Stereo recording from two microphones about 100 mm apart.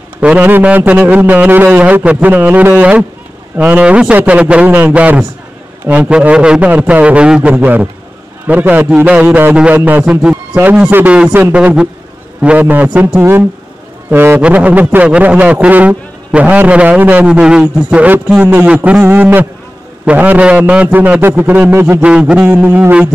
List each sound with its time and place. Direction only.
0.2 s a man's voice: 15° right (ahead or behind)